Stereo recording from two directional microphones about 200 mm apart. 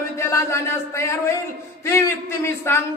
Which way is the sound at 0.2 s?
15° left (ahead or behind).